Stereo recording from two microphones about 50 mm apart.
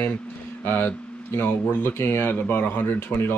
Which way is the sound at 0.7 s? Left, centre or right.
Left.